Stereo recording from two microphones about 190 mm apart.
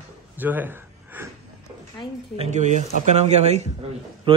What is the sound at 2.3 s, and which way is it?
Speech, 35° right (ahead or behind).